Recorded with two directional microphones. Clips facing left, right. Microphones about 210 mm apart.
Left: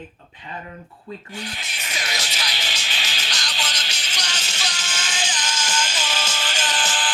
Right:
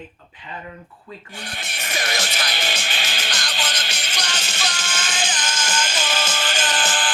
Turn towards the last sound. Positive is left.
turn(degrees=-55)  # may be behind; listen again after turning